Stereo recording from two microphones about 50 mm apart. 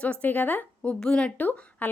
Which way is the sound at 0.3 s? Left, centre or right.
Left.